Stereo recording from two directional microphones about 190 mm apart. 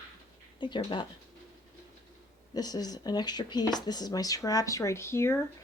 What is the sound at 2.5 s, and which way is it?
Speech, 20° left (ahead or behind).